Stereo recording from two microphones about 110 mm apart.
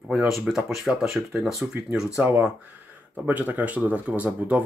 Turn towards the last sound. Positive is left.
turn(degrees=-15)  # may be behind; listen again after turning